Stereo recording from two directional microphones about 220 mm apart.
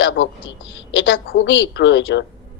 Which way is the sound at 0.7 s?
55° left (ahead or behind).